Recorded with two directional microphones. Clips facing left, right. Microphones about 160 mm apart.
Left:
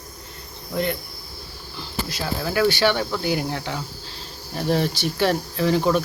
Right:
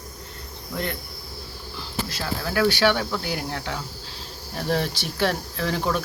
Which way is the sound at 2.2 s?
5° left (ahead or behind).